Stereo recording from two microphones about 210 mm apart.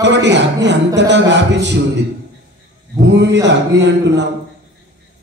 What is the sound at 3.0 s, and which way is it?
Speech, 55° right (ahead or behind).